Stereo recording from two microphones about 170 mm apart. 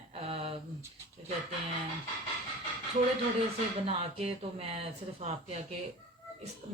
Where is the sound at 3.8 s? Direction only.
35° right (ahead or behind).